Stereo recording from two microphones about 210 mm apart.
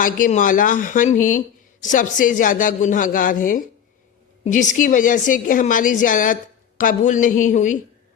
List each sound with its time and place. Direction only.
0.0 s speech: 40° left (ahead or behind)